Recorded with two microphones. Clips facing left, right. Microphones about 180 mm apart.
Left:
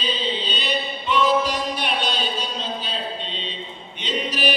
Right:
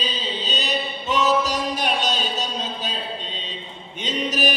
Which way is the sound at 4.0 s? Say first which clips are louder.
Right 1 dB; 45° right (ahead or behind).